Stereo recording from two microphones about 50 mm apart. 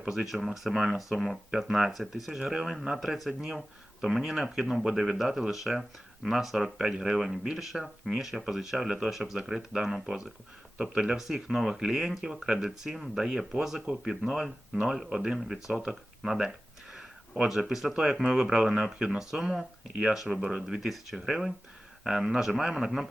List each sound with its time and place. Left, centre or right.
0.3 s speech: centre
16.9 s a sound: centre
17.7 s speech: centre
17.9 s speech: centre
19.3 s speech: centre